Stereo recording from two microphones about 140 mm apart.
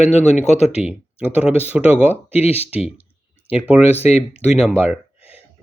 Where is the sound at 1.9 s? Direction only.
10° right (ahead or behind).